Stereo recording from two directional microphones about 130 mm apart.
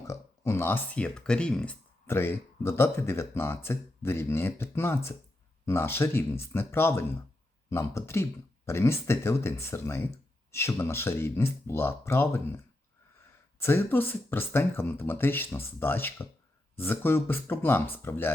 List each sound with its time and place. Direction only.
0.1 s speech: 20° left (ahead or behind)
2.0 s speech: 20° left (ahead or behind)
13.6 s speech: 20° left (ahead or behind)